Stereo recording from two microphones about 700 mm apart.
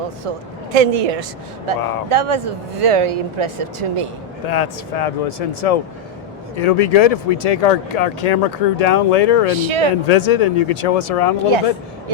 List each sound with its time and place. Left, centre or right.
0.3 s speech: right
1.7 s speech: right
4.4 s speech: left
9.5 s speech: right
10.1 s speech: left